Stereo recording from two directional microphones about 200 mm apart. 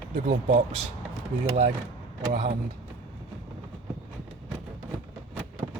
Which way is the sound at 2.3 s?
35° right (ahead or behind).